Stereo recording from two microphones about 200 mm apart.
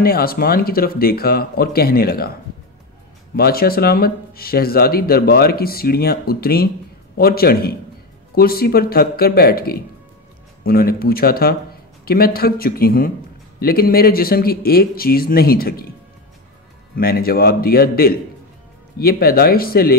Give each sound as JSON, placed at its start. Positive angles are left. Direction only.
{"t": 0.0, "sound": "speech", "side_deg": 50}
{"t": 3.3, "sound": "speech", "side_deg": 50}
{"t": 16.9, "sound": "speech", "side_deg": 50}